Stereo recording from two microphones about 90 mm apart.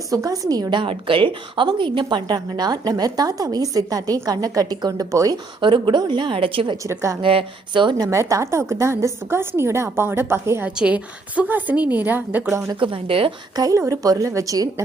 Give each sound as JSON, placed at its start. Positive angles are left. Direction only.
{"t": 0.1, "sound": "a woman's voice", "side_deg": -40}
{"t": 0.8, "sound": "a woman's voice", "side_deg": -75}
{"t": 5.5, "sound": "a woman's voice", "side_deg": -65}
{"t": 7.9, "sound": "a woman's voice", "side_deg": -40}
{"t": 10.8, "sound": "a woman's voice", "side_deg": -15}
{"t": 12.8, "sound": "speech", "side_deg": -80}
{"t": 13.6, "sound": "a woman's voice", "side_deg": -40}